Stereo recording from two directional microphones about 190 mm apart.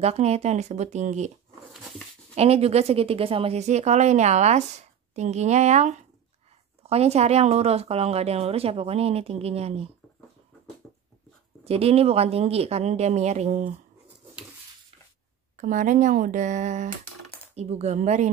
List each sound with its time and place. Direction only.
0.0 s a woman's voice: 35° right (ahead or behind)
2.3 s a woman's voice: 30° right (ahead or behind)
11.6 s a woman's voice: 30° right (ahead or behind)
15.5 s a woman's voice: 45° right (ahead or behind)